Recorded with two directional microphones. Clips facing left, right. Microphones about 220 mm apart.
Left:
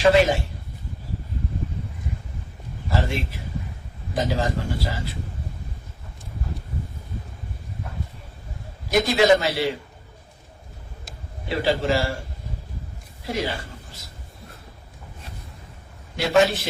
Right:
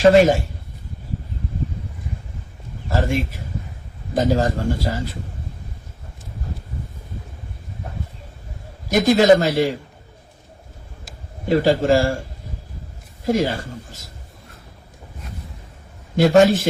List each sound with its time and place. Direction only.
0.0 s speech: 45° right (ahead or behind)
2.9 s speech: 45° right (ahead or behind)
8.9 s speech: 45° right (ahead or behind)
11.4 s speech: 45° right (ahead or behind)
13.2 s a man's voice: 45° right (ahead or behind)
16.1 s speech: 45° right (ahead or behind)